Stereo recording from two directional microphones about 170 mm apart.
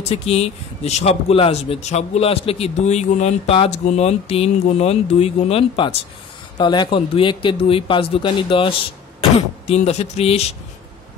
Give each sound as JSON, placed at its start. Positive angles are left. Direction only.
{"t": 0.1, "sound": "a man's voice", "side_deg": 35}